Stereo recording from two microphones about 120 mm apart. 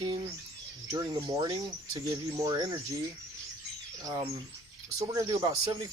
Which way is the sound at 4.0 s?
30° right (ahead or behind).